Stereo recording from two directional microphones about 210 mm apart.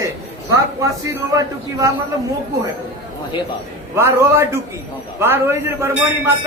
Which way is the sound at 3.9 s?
10° right (ahead or behind).